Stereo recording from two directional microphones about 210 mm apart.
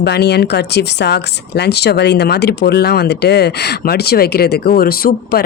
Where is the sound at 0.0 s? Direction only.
50° left (ahead or behind).